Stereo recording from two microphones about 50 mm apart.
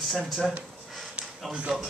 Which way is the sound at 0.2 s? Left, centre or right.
Centre.